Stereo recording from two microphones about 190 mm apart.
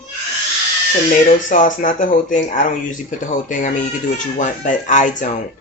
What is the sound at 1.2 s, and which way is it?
Speech, 45° left (ahead or behind).